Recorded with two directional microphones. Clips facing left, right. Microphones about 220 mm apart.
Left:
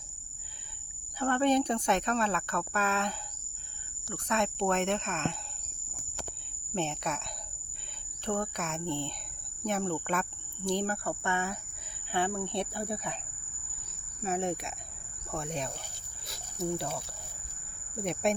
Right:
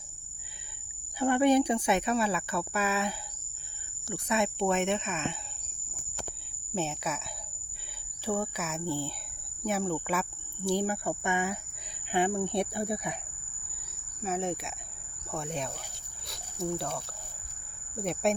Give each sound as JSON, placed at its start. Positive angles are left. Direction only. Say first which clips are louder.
{"t": 1.2, "sound": "speech", "louder": "right 3 dB", "side_deg": -10}
{"t": 6.7, "sound": "speech", "louder": "even", "side_deg": -5}
{"t": 8.2, "sound": "speech", "louder": "right 1 dB", "side_deg": -5}
{"t": 14.2, "sound": "speech", "louder": "even", "side_deg": 0}